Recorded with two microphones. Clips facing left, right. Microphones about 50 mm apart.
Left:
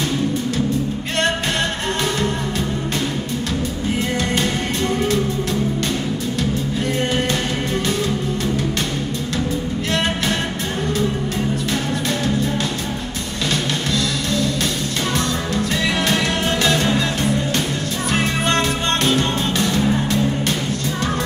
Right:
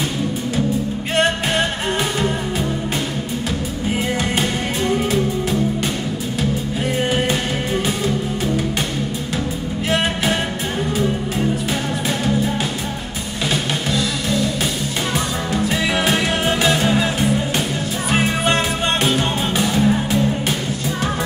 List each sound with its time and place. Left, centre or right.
4.4 s music: centre
7.0 s music: centre
13.9 s music: centre